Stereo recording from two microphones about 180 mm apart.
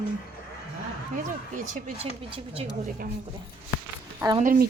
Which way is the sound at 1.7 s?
40° right (ahead or behind).